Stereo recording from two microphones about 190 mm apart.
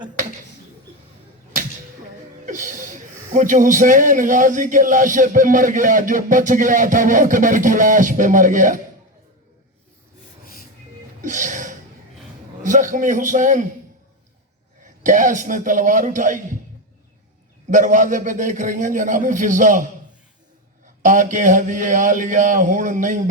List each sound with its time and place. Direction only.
2.5 s a man's voice: 40° right (ahead or behind)
11.2 s music: 40° right (ahead or behind)
12.6 s a man's voice: 40° right (ahead or behind)
14.8 s a man's voice: 40° right (ahead or behind)
17.7 s a man's voice: 40° right (ahead or behind)